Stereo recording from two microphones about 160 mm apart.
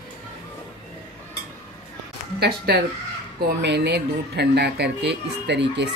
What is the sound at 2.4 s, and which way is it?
Speech, 85° right.